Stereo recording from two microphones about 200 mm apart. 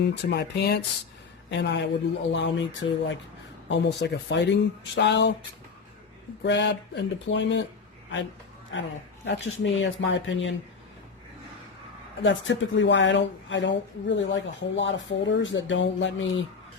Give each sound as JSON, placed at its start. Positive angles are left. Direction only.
{"t": 0.0, "sound": "speech", "side_deg": 55}
{"t": 6.4, "sound": "speech", "side_deg": 60}
{"t": 8.7, "sound": "speech", "side_deg": 70}
{"t": 12.2, "sound": "speech", "side_deg": 65}